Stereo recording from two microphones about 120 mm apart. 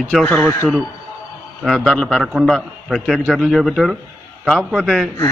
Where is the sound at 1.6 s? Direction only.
Centre (ahead or behind).